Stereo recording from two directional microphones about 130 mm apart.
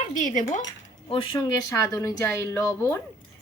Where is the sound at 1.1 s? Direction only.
40° left (ahead or behind); by 3.0 s 20° left (ahead or behind).